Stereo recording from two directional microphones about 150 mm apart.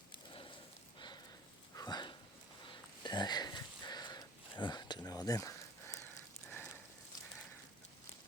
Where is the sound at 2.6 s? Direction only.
30° left (ahead or behind).